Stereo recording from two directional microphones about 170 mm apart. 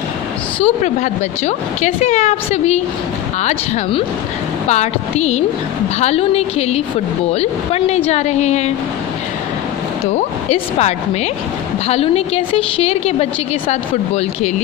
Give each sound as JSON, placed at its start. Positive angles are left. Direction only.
{"t": 0.6, "sound": "a woman's voice", "side_deg": 40}
{"t": 10.1, "sound": "a woman's voice", "side_deg": 40}